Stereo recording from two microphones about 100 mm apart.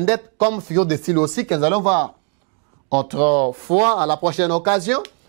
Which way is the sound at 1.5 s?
10° right (ahead or behind).